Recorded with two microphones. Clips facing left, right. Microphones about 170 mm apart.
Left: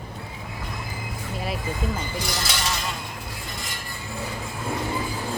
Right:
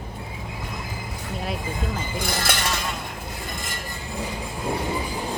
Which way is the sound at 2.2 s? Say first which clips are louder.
Right 3 dB; 55° right (ahead or behind).